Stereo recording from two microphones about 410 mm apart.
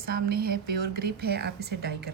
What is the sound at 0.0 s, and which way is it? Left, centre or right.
A woman's voice, right.